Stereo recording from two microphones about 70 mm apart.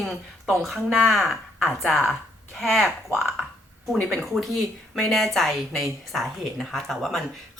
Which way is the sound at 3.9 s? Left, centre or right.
Centre.